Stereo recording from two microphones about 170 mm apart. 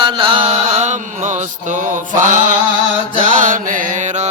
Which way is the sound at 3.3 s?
50° right (ahead or behind).